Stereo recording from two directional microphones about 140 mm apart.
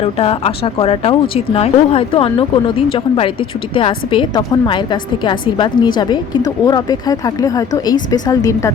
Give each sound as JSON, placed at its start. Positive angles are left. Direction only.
{"t": 0.0, "sound": "a woman's voice", "side_deg": 45}